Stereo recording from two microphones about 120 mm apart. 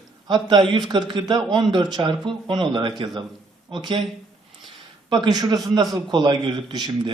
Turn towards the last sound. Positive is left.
turn(degrees=-40)  # may be behind; listen again after turning